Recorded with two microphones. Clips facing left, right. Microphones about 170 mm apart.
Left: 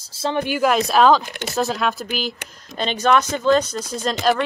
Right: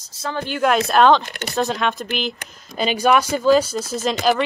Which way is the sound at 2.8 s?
10° right (ahead or behind).